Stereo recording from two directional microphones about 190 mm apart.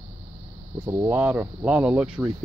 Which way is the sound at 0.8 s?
10° right (ahead or behind).